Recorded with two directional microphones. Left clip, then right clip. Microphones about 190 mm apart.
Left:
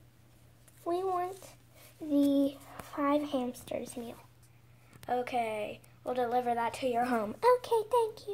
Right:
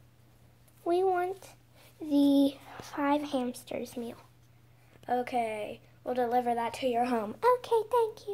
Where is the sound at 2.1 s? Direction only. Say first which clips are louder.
Right 3 dB; 25° right (ahead or behind).